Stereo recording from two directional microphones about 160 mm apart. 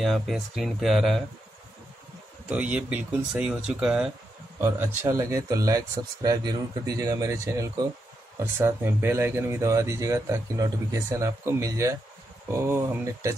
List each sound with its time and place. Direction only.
0.0 s speech: centre (ahead or behind)
2.5 s speech: 10° right (ahead or behind)